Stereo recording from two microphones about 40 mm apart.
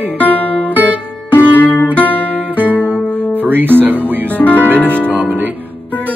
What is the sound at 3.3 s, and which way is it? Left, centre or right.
Speech, right.